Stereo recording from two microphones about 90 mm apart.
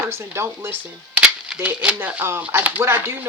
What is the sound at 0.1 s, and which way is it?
Speech, 30° right (ahead or behind).